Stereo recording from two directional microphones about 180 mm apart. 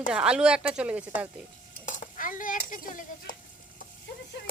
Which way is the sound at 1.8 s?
45° left (ahead or behind).